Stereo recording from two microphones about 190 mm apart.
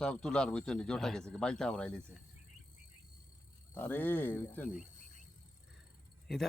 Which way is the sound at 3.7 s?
10° left (ahead or behind).